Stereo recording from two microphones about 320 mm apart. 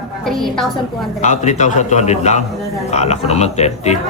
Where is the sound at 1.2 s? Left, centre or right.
Left.